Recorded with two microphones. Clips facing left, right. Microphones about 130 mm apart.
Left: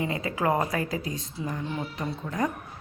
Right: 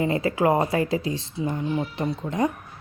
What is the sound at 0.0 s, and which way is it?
Speech, 30° right (ahead or behind).